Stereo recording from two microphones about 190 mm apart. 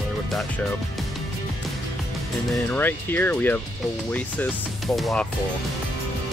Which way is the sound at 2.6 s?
10° left (ahead or behind).